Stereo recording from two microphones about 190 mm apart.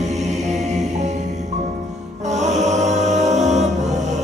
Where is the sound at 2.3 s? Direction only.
35° right (ahead or behind).